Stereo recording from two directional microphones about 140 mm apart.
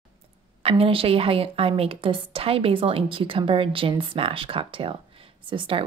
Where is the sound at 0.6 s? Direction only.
45° right (ahead or behind).